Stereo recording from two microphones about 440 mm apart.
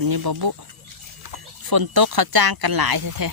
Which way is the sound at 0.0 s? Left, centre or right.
Right.